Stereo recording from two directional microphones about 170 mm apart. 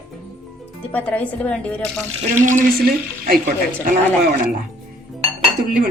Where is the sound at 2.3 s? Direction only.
50° right (ahead or behind).